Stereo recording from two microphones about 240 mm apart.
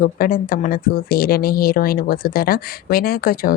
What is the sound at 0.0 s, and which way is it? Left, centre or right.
Speech, left.